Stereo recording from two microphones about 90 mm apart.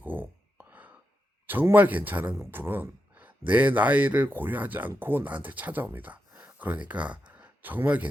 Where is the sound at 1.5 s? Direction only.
20° right (ahead or behind).